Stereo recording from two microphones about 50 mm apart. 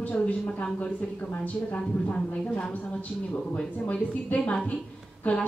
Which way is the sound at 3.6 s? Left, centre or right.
Centre.